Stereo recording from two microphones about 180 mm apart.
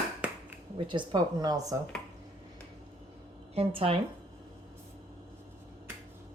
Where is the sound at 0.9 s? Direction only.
25° right (ahead or behind).